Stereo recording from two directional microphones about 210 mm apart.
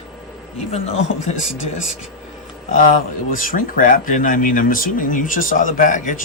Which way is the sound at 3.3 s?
40° left (ahead or behind).